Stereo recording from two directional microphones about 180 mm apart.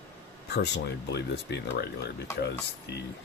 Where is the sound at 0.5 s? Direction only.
70° left (ahead or behind).